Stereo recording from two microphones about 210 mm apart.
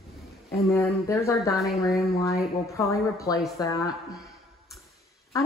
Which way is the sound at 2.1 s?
15° left (ahead or behind).